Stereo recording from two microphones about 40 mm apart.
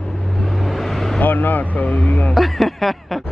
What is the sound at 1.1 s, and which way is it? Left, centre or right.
Speech, left.